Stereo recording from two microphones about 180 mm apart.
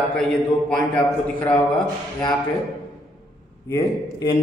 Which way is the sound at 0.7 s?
10° left (ahead or behind).